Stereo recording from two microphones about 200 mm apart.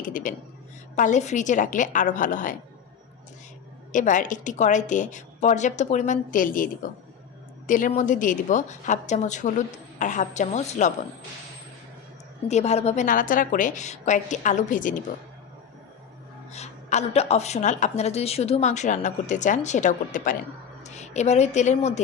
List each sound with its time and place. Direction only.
0.1 s a woman's voice: 40° left (ahead or behind)
3.9 s a woman's voice: 40° left (ahead or behind)
7.7 s a woman's voice: 40° left (ahead or behind)
12.5 s a woman's voice: 35° left (ahead or behind)
16.5 s a woman's voice: 35° left (ahead or behind)